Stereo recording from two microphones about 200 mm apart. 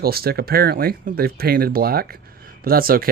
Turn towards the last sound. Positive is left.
turn(degrees=-45)  # may be behind; listen again after turning